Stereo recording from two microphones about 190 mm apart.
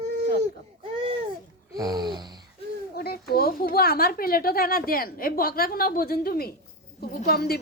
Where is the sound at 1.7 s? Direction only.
20° right (ahead or behind).